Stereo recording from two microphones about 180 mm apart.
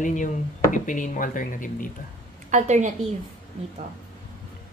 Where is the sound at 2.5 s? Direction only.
40° right (ahead or behind).